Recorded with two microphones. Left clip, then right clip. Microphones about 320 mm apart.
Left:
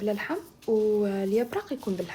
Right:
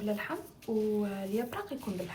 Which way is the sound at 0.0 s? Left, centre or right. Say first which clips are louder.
Left 6 dB; centre.